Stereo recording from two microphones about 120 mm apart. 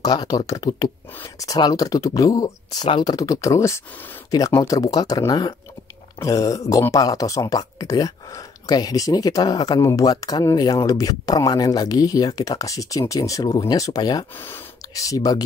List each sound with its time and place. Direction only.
0.0 s speech: 35° left (ahead or behind)
14.3 s speech: 15° left (ahead or behind)
15.0 s speech: 30° left (ahead or behind)